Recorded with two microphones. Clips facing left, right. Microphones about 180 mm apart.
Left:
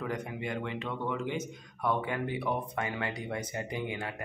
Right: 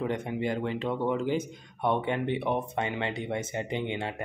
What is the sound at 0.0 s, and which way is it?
A man's voice, 25° right (ahead or behind).